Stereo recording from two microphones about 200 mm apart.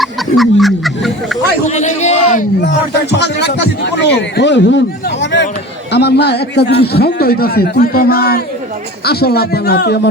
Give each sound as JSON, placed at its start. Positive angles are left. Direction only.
{"t": 0.0, "sound": "a sound", "side_deg": 0}
{"t": 1.6, "sound": "a man's voice", "side_deg": 35}
{"t": 2.6, "sound": "a man's voice", "side_deg": 60}